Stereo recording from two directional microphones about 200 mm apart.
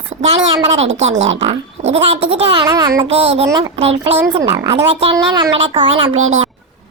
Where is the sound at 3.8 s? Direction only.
30° right (ahead or behind).